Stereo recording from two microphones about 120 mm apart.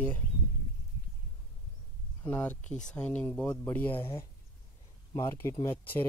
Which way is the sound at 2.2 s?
15° left (ahead or behind).